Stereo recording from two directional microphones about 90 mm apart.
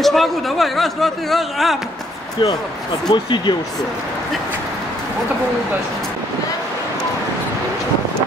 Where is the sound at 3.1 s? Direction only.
60° left (ahead or behind).